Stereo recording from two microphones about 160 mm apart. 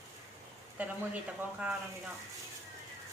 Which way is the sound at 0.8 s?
10° right (ahead or behind).